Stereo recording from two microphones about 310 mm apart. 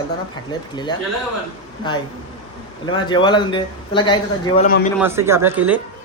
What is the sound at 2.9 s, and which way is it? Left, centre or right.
A man's voice, centre.